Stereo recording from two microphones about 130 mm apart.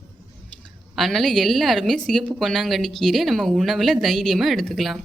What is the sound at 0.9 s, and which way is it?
Speech, centre (ahead or behind).